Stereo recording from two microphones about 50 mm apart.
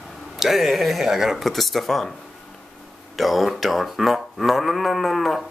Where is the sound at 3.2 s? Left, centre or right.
Centre.